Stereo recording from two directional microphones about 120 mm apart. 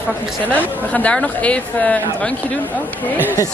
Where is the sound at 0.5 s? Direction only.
15° left (ahead or behind).